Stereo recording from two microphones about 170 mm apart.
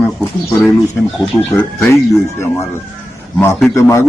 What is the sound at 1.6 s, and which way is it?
Speech, 15° left (ahead or behind).